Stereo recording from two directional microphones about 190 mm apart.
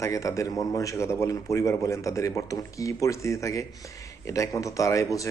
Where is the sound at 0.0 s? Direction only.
15° left (ahead or behind).